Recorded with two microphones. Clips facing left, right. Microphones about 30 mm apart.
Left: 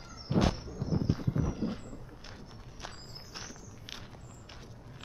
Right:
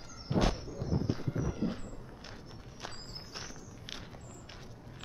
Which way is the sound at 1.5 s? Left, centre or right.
Centre.